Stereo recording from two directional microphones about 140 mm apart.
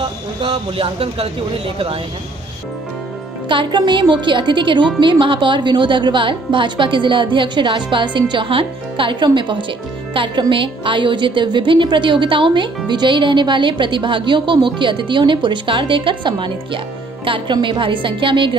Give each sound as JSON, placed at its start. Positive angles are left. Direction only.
{"t": 0.0, "sound": "speech", "side_deg": -40}
{"t": 3.4, "sound": "a woman's voice", "side_deg": -35}